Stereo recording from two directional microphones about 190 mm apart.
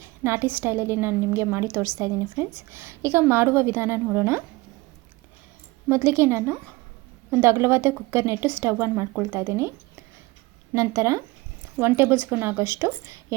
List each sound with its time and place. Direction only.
0.0 s a woman's voice: 10° right (ahead or behind)
5.9 s a woman's voice: 15° right (ahead or behind)